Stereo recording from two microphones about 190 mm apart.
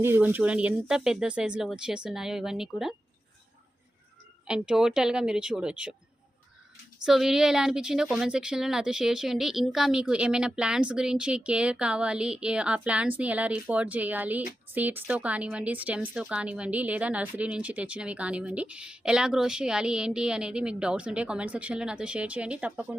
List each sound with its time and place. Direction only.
0.0 s speech: 10° right (ahead or behind)
4.4 s speech: 5° right (ahead or behind)
7.0 s speech: centre (ahead or behind)